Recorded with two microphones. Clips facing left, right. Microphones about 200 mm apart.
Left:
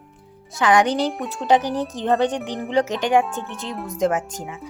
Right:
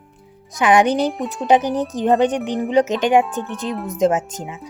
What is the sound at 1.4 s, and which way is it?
Speech, 20° right (ahead or behind).